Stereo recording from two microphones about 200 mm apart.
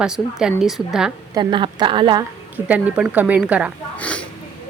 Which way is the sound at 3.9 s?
5° left (ahead or behind).